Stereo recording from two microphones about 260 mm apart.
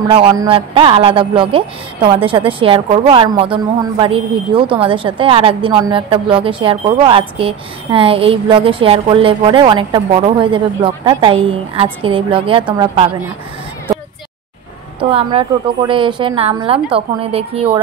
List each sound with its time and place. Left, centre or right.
0.1 s a woman's voice: centre
15.0 s a woman's voice: centre